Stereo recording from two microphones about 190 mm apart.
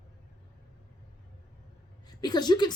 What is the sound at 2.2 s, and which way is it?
Speech, 20° left (ahead or behind).